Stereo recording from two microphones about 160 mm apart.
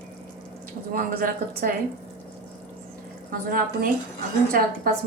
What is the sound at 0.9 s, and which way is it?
Speech, 60° right (ahead or behind).